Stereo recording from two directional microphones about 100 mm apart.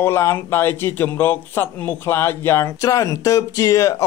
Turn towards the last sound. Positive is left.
turn(degrees=30)  # may be behind; listen again after turning